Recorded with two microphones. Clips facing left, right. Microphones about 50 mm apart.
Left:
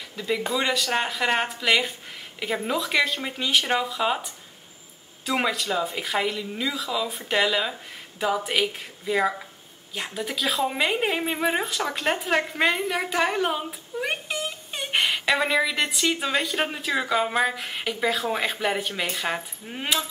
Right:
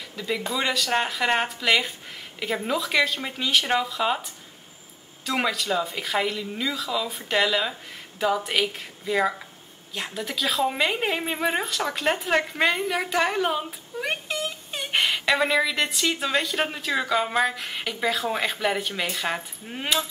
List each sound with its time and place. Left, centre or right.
0.1 s a woman's voice: centre